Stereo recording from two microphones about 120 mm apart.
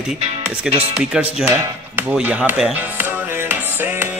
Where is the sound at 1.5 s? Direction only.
15° right (ahead or behind).